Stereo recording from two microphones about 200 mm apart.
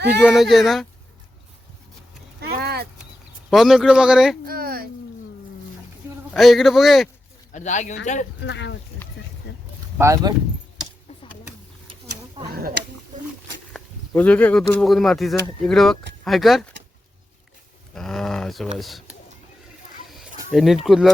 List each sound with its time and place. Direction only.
0.2 s speech: 5° right (ahead or behind)
2.4 s a sound: 50° right (ahead or behind)
3.5 s speech: centre (ahead or behind)
4.4 s speech: 45° right (ahead or behind)
6.3 s speech: centre (ahead or behind)
7.5 s speech: 35° left (ahead or behind)
8.4 s speech: 60° left (ahead or behind)
9.5 s a sound: 55° left (ahead or behind)
10.0 s speech: 15° right (ahead or behind)
12.5 s speech: 50° right (ahead or behind)
14.1 s speech: 10° left (ahead or behind)
17.9 s speech: centre (ahead or behind)
20.1 s a sound: centre (ahead or behind)